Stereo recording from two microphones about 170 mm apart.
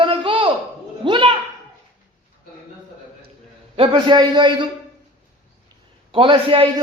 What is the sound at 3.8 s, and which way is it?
Speech, 30° right (ahead or behind).